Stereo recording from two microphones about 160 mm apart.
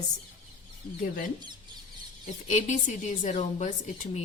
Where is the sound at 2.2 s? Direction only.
50° left (ahead or behind).